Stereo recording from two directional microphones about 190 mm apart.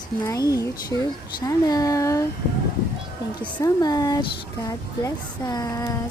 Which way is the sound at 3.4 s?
10° left (ahead or behind).